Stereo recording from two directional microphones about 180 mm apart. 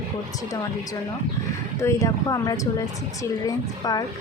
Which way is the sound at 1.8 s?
15° left (ahead or behind).